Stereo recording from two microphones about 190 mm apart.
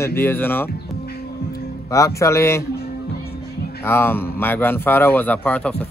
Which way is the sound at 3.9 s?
10° left (ahead or behind).